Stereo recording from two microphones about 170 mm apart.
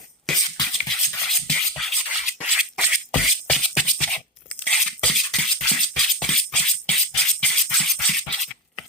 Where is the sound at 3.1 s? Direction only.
5° left (ahead or behind).